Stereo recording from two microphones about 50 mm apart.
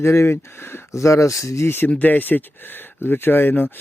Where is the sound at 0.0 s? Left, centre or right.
Left.